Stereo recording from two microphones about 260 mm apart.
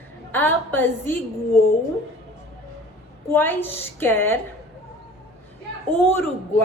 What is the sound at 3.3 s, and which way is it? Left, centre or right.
Speech, centre.